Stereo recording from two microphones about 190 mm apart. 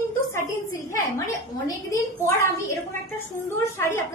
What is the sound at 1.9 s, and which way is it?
Speech, 15° left (ahead or behind).